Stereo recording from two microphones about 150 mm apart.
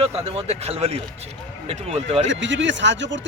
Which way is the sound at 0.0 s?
40° right (ahead or behind).